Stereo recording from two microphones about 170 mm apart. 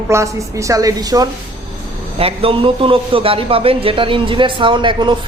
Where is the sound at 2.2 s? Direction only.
35° right (ahead or behind).